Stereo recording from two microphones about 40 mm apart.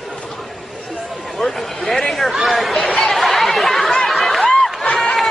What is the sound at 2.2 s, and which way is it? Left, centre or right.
Chatter, centre.